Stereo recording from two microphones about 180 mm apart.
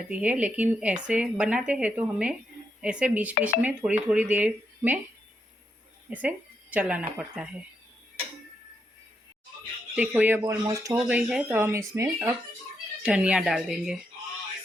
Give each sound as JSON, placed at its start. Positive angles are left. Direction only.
{"t": 0.1, "sound": "a woman's voice", "side_deg": -10}
{"t": 6.1, "sound": "speech", "side_deg": -10}
{"t": 9.9, "sound": "a woman's voice", "side_deg": -10}
{"t": 10.9, "sound": "a woman's voice", "side_deg": -5}